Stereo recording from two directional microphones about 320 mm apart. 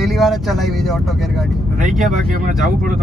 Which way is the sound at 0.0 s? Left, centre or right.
Centre.